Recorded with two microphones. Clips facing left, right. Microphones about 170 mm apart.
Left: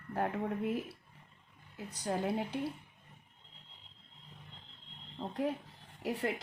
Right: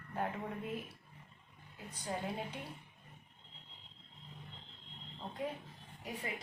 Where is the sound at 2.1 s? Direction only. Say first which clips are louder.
Left 5 dB; 60° left (ahead or behind).